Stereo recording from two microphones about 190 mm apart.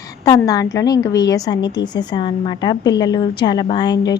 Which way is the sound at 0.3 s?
20° left (ahead or behind).